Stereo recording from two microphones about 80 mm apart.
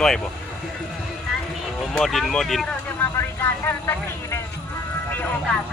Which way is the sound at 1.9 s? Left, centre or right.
Centre.